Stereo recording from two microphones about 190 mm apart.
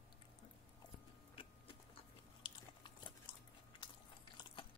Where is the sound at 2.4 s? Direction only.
25° left (ahead or behind).